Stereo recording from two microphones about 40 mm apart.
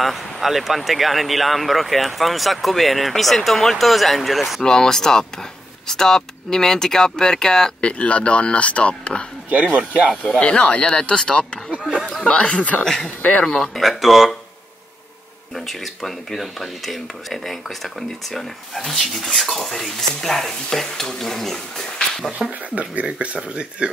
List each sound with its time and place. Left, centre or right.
0.0 s speech: centre
4.6 s speech: centre
7.8 s speech: left
9.5 s speech: right
10.4 s speech: left
13.4 s speech: centre
13.7 s speech: centre
15.5 s speech: centre
22.5 s speech: right